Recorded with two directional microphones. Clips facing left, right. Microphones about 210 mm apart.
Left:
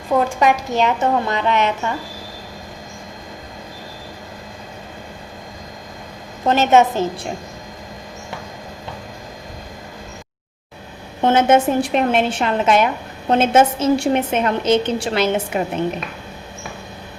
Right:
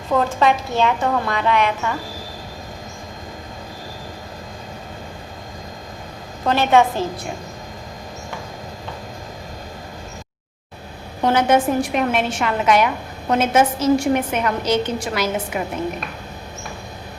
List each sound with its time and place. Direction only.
0.1 s a woman's voice: 15° left (ahead or behind)
6.4 s a woman's voice: 20° left (ahead or behind)
11.2 s a woman's voice: 25° left (ahead or behind)